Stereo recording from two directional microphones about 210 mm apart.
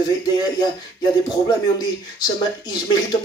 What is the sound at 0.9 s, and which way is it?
Speech, 20° left (ahead or behind).